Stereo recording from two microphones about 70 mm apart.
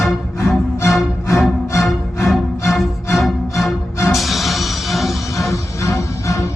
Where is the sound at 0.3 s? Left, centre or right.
Left.